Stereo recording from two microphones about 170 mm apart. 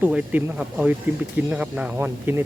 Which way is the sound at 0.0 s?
10° right (ahead or behind).